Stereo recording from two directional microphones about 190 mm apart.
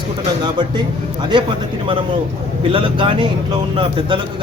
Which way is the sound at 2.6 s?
25° right (ahead or behind).